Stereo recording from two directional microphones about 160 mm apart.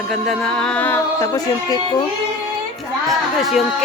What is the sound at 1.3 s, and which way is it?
Speech, 25° left (ahead or behind).